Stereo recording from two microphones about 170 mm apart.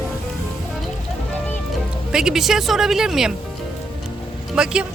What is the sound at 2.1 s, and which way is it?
A woman's voice, 5° right (ahead or behind).